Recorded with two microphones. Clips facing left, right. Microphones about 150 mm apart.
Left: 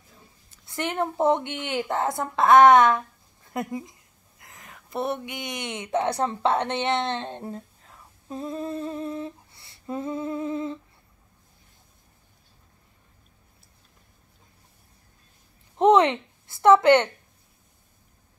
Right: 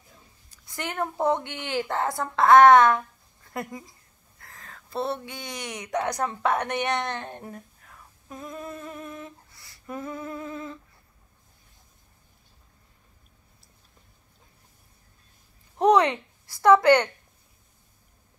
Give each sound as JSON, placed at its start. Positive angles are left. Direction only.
{"t": 0.7, "sound": "speech", "side_deg": 20}
{"t": 15.8, "sound": "a woman's voice", "side_deg": 20}